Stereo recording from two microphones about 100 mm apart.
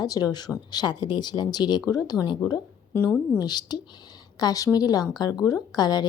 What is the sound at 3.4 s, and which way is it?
A woman's voice, 45° left (ahead or behind).